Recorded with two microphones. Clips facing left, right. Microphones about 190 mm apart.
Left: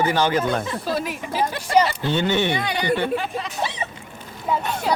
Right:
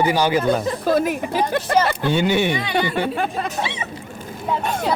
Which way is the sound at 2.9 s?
50° right (ahead or behind).